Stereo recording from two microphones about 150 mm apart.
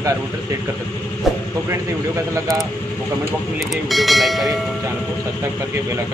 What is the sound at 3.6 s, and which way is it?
Speech, centre (ahead or behind).